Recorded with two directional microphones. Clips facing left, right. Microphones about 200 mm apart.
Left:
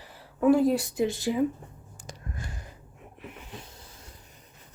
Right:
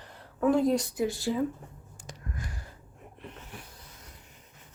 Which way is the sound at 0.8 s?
25° left (ahead or behind).